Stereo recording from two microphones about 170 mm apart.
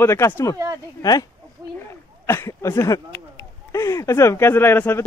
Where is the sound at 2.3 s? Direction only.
15° left (ahead or behind).